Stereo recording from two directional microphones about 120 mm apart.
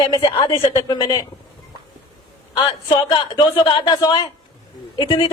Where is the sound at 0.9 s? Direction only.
30° left (ahead or behind).